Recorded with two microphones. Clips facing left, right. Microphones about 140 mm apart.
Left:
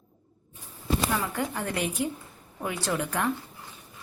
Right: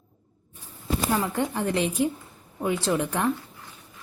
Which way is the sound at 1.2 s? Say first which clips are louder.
Right 4 dB; 25° right (ahead or behind).